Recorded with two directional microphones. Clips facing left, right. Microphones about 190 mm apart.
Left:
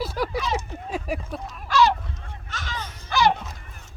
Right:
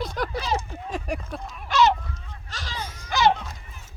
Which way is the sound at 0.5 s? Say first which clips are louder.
Even; 10° left (ahead or behind).